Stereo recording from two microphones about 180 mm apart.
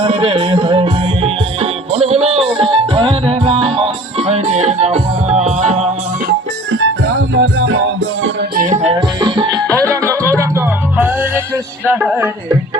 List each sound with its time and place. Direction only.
0.0 s music: 30° right (ahead or behind)
6.7 s music: 90° right
8.5 s music: 45° right (ahead or behind); by 11.3 s 10° right (ahead or behind)
11.9 s speech: 10° right (ahead or behind)